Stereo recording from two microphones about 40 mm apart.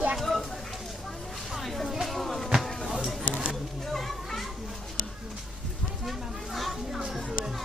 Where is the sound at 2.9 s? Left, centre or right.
Centre.